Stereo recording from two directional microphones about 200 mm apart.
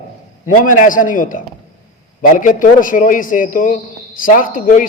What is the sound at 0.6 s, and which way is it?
A man's voice, 40° left (ahead or behind).